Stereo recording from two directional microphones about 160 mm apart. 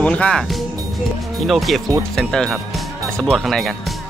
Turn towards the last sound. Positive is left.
turn(degrees=0)  # may be behind; listen again after turning